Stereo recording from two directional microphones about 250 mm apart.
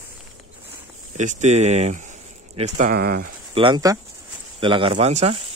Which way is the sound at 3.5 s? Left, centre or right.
Centre.